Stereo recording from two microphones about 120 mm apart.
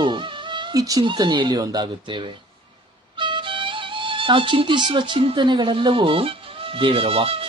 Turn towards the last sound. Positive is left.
turn(degrees=-50)  # may be behind; listen again after turning